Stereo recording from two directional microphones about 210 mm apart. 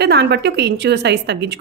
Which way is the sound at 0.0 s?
50° right (ahead or behind).